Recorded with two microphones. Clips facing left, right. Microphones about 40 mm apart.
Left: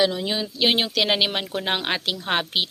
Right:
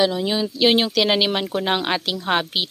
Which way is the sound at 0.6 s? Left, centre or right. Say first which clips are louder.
Right 4 dB; left.